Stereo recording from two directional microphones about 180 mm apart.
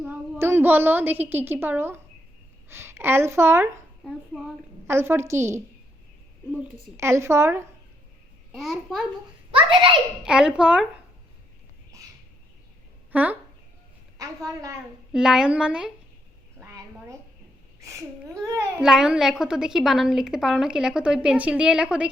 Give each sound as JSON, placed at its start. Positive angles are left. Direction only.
{"t": 0.0, "sound": "a woman's voice", "side_deg": -10}
{"t": 4.9, "sound": "a woman's voice", "side_deg": -15}
{"t": 6.9, "sound": "a woman's voice", "side_deg": -15}
{"t": 8.5, "sound": "a woman's voice", "side_deg": 0}
{"t": 9.5, "sound": "a child's voice", "side_deg": -30}
{"t": 10.2, "sound": "a woman's voice", "side_deg": -5}
{"t": 13.1, "sound": "a sound", "side_deg": -10}
{"t": 14.2, "sound": "a woman's voice", "side_deg": -20}
{"t": 15.1, "sound": "a woman's voice", "side_deg": -5}
{"t": 16.6, "sound": "a sound", "side_deg": -15}
{"t": 18.8, "sound": "a woman's voice", "side_deg": -5}